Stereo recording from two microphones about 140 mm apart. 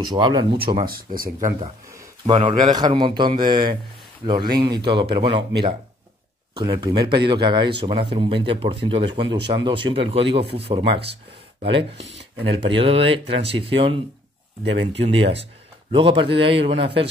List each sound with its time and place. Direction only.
0.0 s speech: 30° right (ahead or behind)
0.8 s speech: 90° right
2.2 s speech: 35° right (ahead or behind)